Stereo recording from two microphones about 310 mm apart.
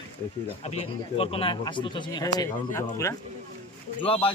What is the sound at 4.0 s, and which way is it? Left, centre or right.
Speech, centre.